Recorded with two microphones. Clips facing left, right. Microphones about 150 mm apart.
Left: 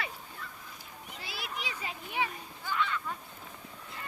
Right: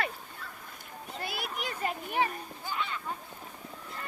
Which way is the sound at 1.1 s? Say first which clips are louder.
Right 5 dB; 55° right (ahead or behind).